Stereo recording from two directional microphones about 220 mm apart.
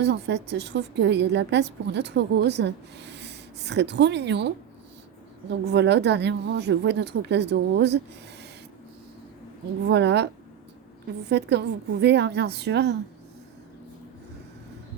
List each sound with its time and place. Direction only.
0.0 s a woman's voice: 50° right (ahead or behind)
5.5 s a woman's voice: 50° right (ahead or behind)
9.9 s a woman's voice: 50° right (ahead or behind)
11.3 s a woman's voice: 50° right (ahead or behind)